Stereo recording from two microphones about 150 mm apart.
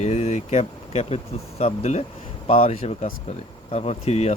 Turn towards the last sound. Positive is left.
turn(degrees=45)  # may be behind; listen again after turning